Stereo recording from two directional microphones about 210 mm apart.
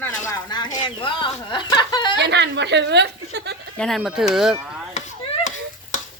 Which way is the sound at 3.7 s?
Centre (ahead or behind).